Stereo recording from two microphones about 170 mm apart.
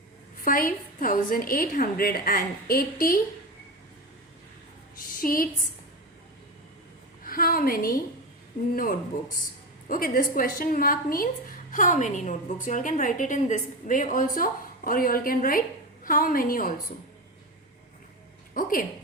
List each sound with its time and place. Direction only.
0.4 s a woman's voice: 55° left (ahead or behind)
4.9 s a sound: 55° left (ahead or behind)
7.3 s a woman's voice: 60° left (ahead or behind)
18.5 s a woman's voice: 55° left (ahead or behind)